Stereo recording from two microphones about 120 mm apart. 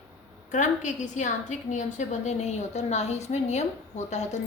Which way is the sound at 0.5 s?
90° left.